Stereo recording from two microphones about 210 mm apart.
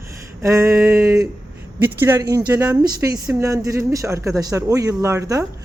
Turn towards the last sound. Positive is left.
turn(degrees=-15)  # may be behind; listen again after turning